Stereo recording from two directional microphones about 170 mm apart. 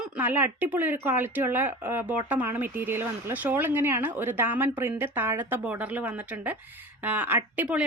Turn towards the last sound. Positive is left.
turn(degrees=-10)  # may be behind; listen again after turning